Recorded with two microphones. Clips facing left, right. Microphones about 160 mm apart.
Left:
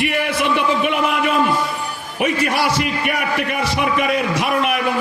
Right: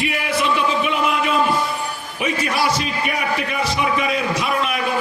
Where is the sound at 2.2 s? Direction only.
60° left (ahead or behind).